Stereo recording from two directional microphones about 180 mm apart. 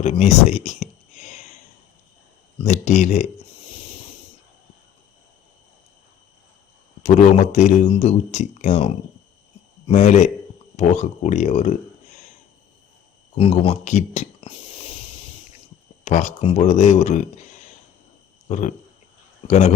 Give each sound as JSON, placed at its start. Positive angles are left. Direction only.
{"t": 0.0, "sound": "a sound", "side_deg": 40}
{"t": 2.6, "sound": "speech", "side_deg": 40}
{"t": 7.0, "sound": "speech", "side_deg": 40}
{"t": 9.9, "sound": "speech", "side_deg": 40}
{"t": 13.3, "sound": "speech", "side_deg": 30}
{"t": 16.0, "sound": "speech", "side_deg": 40}
{"t": 18.4, "sound": "speech", "side_deg": 40}